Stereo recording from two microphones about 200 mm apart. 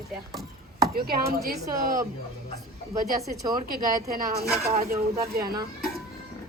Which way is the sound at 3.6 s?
45° right (ahead or behind).